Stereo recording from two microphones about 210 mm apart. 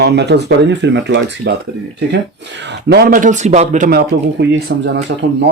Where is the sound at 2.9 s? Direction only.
45° right (ahead or behind).